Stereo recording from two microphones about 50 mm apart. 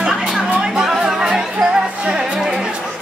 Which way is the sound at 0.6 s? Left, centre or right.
Centre.